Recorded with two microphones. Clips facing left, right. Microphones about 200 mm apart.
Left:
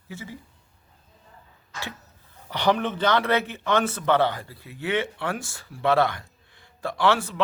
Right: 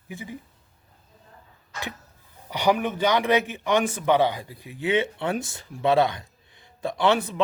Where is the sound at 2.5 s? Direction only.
10° right (ahead or behind).